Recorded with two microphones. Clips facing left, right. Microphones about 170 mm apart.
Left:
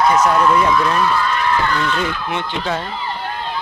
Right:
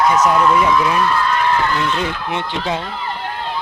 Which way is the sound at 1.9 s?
30° right (ahead or behind).